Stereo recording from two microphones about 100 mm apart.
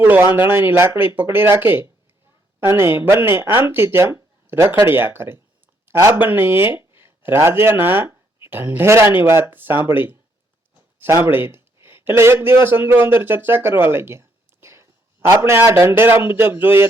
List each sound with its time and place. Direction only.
0.0 s speech: 20° right (ahead or behind)